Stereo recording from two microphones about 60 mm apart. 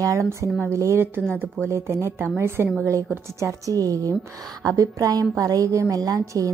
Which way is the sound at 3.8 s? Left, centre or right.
Right.